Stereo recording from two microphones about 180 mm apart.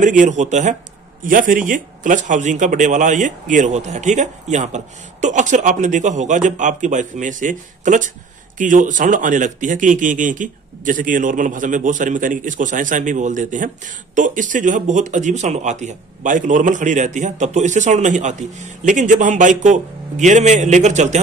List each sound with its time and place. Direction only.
0.0 s speech: 45° right (ahead or behind)